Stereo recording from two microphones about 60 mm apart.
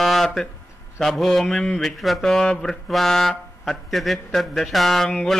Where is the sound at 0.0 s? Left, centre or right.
Centre.